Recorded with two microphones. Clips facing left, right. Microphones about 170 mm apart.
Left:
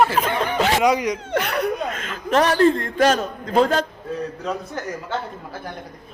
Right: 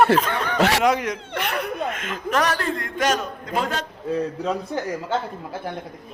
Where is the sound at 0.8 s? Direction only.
Centre (ahead or behind).